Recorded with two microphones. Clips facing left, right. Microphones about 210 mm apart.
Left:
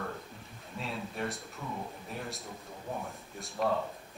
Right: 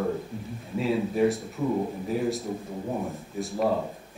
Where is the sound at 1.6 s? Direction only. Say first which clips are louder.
Right 15 dB; 30° right (ahead or behind).